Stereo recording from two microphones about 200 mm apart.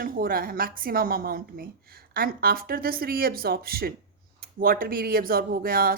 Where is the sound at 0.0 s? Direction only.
45° right (ahead or behind).